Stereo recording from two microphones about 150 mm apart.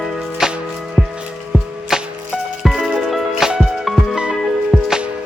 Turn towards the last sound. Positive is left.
turn(degrees=-5)  # may be behind; listen again after turning